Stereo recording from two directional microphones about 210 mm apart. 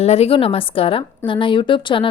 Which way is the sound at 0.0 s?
30° left (ahead or behind).